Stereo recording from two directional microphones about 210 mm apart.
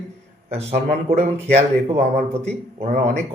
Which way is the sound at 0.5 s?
30° right (ahead or behind).